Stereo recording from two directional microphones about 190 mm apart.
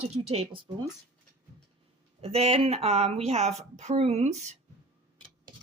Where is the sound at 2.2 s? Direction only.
30° right (ahead or behind).